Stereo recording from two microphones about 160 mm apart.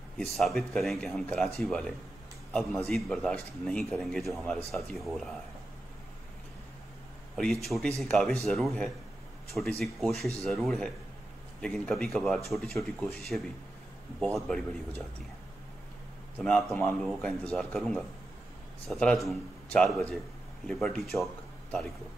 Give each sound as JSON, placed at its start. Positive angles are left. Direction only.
{"t": 0.2, "sound": "a man's voice", "side_deg": 0}
{"t": 7.6, "sound": "a man's voice", "side_deg": 0}
{"t": 16.4, "sound": "a man's voice", "side_deg": 5}